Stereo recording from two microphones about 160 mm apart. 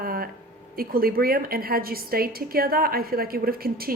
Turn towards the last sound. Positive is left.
turn(degrees=-70)  # may be behind; listen again after turning